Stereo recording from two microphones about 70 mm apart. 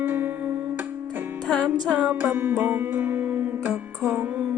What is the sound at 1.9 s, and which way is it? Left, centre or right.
Music, right.